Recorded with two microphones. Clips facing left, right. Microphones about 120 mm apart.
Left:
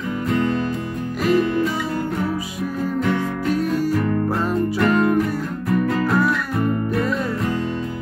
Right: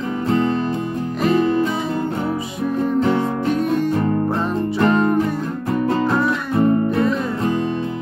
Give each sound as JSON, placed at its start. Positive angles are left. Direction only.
{"t": 0.3, "sound": "music", "side_deg": -30}
{"t": 4.6, "sound": "music", "side_deg": -30}